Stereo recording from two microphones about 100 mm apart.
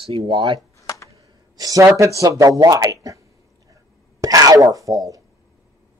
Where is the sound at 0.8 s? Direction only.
35° left (ahead or behind).